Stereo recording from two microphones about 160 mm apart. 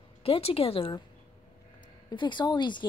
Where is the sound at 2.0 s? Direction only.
30° left (ahead or behind).